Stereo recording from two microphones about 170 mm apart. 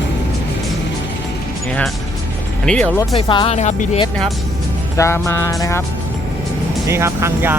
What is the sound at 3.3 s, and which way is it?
Speech, 30° left (ahead or behind).